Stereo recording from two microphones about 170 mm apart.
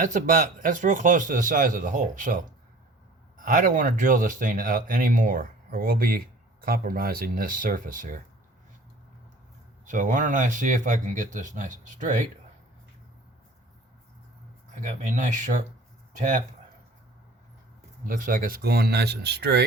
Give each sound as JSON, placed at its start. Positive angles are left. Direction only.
{"t": 0.0, "sound": "speech", "side_deg": -50}
{"t": 3.4, "sound": "speech", "side_deg": -55}
{"t": 9.8, "sound": "speech", "side_deg": -50}
{"t": 14.8, "sound": "speech", "side_deg": -45}
{"t": 18.0, "sound": "speech", "side_deg": -55}